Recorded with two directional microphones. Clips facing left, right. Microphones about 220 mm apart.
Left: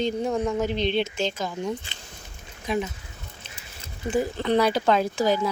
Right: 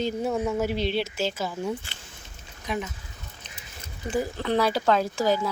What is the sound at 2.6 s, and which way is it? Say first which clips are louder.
Speech: left 4 dB; 25° left (ahead or behind).